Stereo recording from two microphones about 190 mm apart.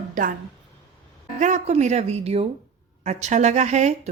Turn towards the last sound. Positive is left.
turn(degrees=-35)  # may be behind; listen again after turning